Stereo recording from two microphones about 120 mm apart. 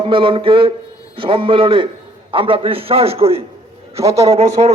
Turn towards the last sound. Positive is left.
turn(degrees=-60)  # may be behind; listen again after turning